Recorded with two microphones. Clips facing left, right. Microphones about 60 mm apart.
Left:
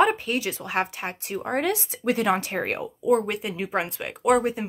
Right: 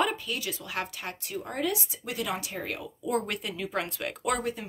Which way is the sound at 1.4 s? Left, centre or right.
Left.